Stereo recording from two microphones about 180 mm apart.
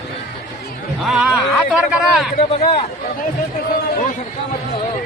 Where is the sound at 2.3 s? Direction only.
35° left (ahead or behind).